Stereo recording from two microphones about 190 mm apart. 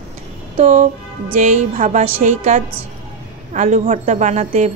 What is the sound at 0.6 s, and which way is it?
A woman's voice, 35° right (ahead or behind).